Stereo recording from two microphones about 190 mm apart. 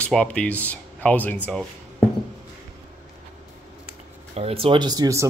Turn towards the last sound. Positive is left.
turn(degrees=-20)  # may be behind; listen again after turning